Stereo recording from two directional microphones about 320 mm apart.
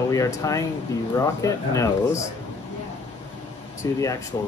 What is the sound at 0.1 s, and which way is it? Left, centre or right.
Speech, centre.